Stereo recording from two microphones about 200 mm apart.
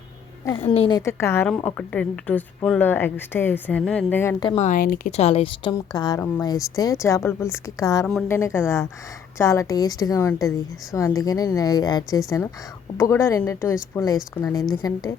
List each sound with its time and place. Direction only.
0.4 s a woman's voice: 25° left (ahead or behind)
0.9 s a woman's voice: 15° left (ahead or behind)
4.4 s speech: 35° left (ahead or behind)
5.1 s a woman's voice: 30° left (ahead or behind)